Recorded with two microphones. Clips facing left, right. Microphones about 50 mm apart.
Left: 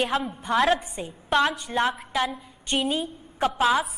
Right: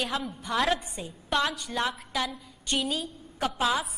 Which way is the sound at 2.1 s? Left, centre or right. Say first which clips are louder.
Left 5 dB; left.